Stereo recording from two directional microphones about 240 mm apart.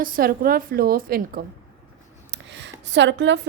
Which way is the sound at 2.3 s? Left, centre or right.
Right.